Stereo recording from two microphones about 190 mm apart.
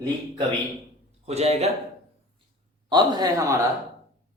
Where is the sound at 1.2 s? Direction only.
35° right (ahead or behind).